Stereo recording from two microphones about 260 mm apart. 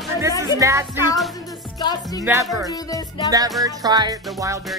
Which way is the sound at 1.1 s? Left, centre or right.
Centre.